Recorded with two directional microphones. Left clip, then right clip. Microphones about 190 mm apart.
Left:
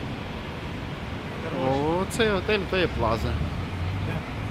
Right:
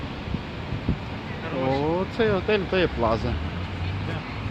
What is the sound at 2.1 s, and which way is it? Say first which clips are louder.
Speech: right 2 dB; 15° right (ahead or behind).